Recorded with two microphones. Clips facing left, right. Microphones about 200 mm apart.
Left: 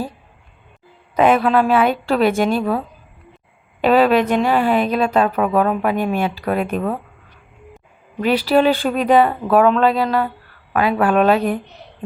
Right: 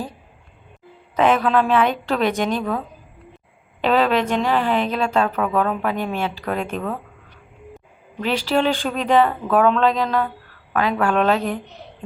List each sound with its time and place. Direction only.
1.1 s speech: 10° left (ahead or behind)
8.2 s speech: 10° left (ahead or behind)